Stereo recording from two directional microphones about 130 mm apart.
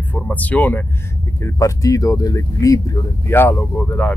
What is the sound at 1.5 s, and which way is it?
Speech, 25° left (ahead or behind).